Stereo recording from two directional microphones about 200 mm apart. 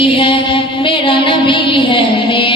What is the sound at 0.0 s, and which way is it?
Music, 25° left (ahead or behind).